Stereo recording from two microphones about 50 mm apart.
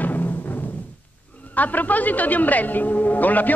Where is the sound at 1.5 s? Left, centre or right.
Left.